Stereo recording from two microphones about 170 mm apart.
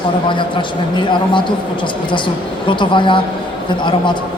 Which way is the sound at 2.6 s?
30° left (ahead or behind).